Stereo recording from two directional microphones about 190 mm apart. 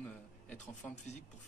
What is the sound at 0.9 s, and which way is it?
Speech, 40° left (ahead or behind).